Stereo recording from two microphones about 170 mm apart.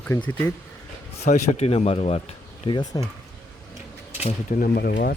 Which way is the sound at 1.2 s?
40° left (ahead or behind).